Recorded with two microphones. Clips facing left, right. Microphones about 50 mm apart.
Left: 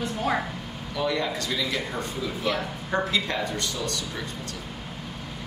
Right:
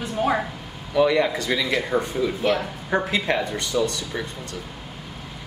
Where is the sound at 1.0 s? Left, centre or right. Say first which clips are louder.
Right 8 dB; right.